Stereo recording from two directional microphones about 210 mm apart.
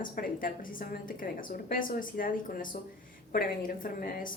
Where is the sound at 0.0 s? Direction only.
40° left (ahead or behind).